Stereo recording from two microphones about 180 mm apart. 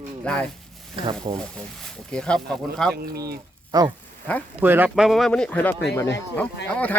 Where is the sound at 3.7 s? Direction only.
20° right (ahead or behind).